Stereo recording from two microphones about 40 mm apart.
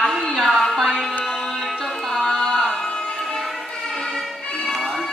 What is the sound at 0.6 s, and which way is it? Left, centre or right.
Music, centre.